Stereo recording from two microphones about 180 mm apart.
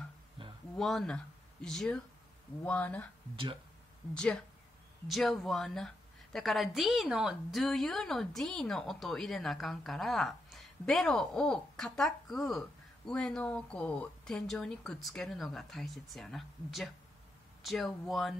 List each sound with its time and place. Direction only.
0.4 s a sound: 30° right (ahead or behind)
0.7 s speech: centre (ahead or behind)
4.1 s a woman's voice: 5° left (ahead or behind)